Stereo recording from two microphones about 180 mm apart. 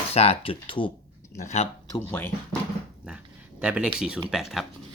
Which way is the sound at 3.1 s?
5° right (ahead or behind).